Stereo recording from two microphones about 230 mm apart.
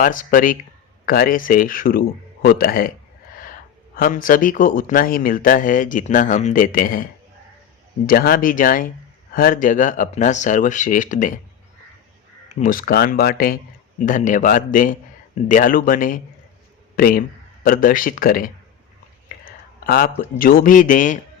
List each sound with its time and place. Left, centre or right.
0.0 s speech: left
3.9 s speech: left
12.5 s speech: left
19.5 s a sound: left
20.4 s speech: left